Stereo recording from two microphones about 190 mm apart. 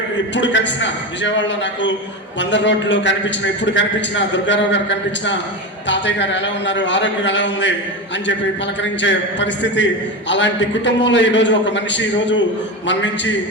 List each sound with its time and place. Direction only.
0.3 s a man's voice: 70° left (ahead or behind)
8.8 s a man's voice: 70° left (ahead or behind)